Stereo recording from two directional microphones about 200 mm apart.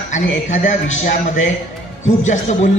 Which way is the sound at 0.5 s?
40° left (ahead or behind).